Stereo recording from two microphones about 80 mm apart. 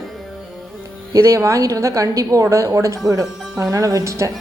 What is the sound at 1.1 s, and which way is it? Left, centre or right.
A woman's voice, right.